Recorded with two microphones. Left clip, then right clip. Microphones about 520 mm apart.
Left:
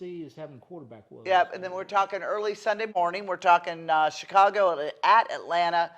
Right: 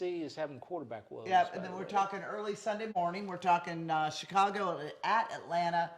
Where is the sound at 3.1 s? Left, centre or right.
Left.